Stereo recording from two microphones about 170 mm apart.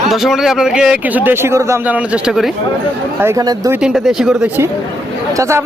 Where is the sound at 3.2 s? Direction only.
15° right (ahead or behind).